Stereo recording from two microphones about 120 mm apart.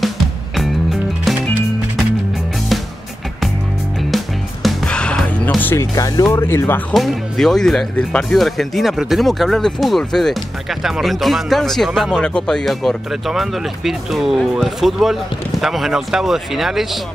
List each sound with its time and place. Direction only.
4.6 s music: 10° left (ahead or behind)
5.8 s speech: 30° left (ahead or behind)
6.9 s speech: centre (ahead or behind)